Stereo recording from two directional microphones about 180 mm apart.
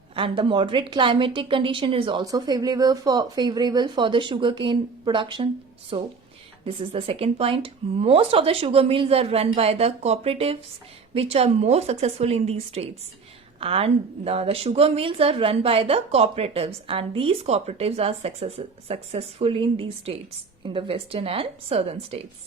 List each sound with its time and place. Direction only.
0.2 s a woman's voice: 25° right (ahead or behind)